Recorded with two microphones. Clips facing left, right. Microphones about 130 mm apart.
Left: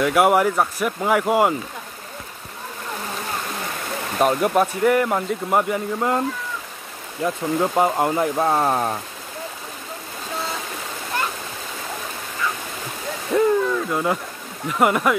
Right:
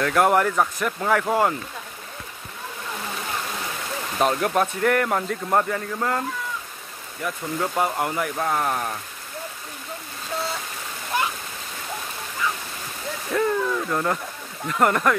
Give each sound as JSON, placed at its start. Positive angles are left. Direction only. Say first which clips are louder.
{"t": 0.0, "sound": "speech", "louder": "left 3 dB", "side_deg": 10}
{"t": 4.2, "sound": "speech", "louder": "left 3 dB", "side_deg": 5}
{"t": 7.2, "sound": "speech", "louder": "left 5 dB", "side_deg": 20}
{"t": 13.3, "sound": "speech", "louder": "left 5 dB", "side_deg": 20}
{"t": 13.8, "sound": "speech", "louder": "left 2 dB", "side_deg": 10}